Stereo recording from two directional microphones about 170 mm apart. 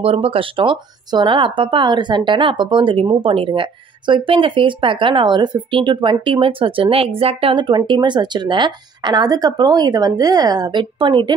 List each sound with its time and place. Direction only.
0.0 s speech: 35° right (ahead or behind)